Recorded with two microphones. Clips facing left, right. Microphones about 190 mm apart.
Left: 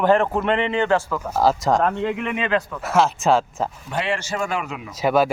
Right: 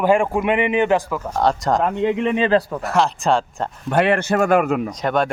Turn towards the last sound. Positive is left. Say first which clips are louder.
# left 2 dB
turn(degrees=5)  # may be behind; listen again after turning